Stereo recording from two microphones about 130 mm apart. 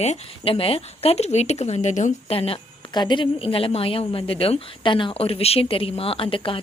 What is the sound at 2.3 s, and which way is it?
A woman's voice, 45° left (ahead or behind).